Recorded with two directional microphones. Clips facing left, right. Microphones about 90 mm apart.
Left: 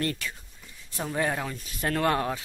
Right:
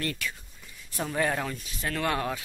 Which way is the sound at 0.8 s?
15° left (ahead or behind).